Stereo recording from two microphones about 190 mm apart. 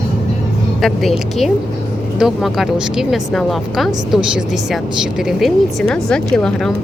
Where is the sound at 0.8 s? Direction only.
Centre (ahead or behind).